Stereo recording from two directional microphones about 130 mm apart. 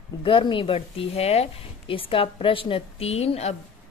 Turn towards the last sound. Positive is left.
turn(degrees=55)  # may be behind; listen again after turning